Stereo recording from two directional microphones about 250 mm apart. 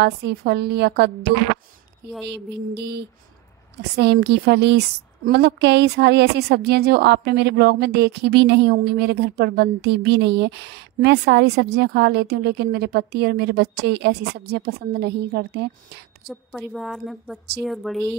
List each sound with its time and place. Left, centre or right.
0.0 s a woman's voice: right
2.2 s music: right
3.9 s a woman's voice: right
16.3 s a woman's voice: centre